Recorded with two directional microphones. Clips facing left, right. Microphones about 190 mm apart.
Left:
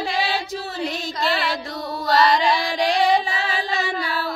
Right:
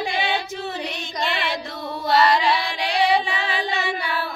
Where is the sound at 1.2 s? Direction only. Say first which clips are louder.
Left 2 dB; 40° left (ahead or behind).